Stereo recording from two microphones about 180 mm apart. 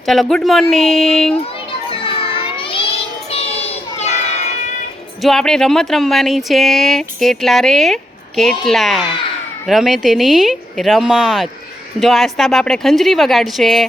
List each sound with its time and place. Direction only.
0.0 s speech: centre (ahead or behind)
1.9 s child singing: 25° left (ahead or behind)
5.2 s speech: centre (ahead or behind)